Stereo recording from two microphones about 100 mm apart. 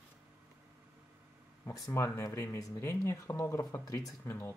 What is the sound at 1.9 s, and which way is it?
Speech, 30° left (ahead or behind).